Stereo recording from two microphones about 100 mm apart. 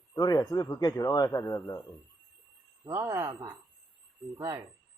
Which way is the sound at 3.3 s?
45° right (ahead or behind).